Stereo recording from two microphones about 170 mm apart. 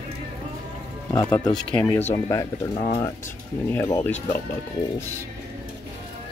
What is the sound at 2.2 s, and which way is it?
Speech, 20° left (ahead or behind).